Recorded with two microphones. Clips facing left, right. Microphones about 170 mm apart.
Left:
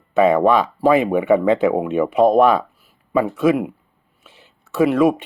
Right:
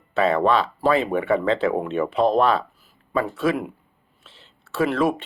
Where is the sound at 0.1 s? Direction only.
15° left (ahead or behind).